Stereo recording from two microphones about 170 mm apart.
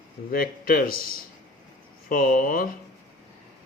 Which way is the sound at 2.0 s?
55° left (ahead or behind).